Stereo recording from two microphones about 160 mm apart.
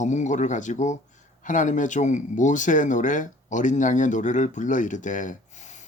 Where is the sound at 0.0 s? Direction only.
50° left (ahead or behind).